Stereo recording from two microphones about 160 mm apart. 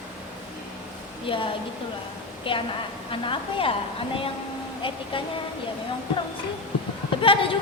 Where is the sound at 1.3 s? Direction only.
35° left (ahead or behind).